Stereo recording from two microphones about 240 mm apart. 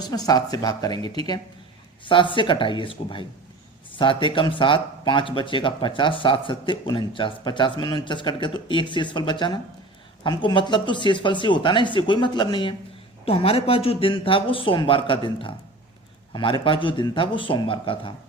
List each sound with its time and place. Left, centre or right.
0.0 s speech: centre